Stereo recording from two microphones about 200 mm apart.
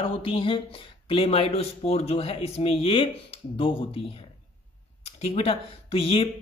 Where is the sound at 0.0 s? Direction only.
25° left (ahead or behind).